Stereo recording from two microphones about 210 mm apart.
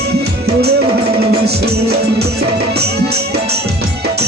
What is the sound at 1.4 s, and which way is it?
Music, 50° right (ahead or behind).